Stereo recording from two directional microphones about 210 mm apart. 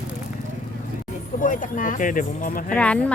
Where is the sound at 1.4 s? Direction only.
40° left (ahead or behind).